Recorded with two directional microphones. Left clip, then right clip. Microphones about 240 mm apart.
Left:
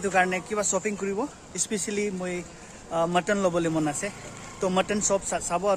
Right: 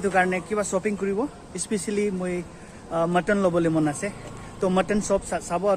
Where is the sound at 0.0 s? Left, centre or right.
Centre.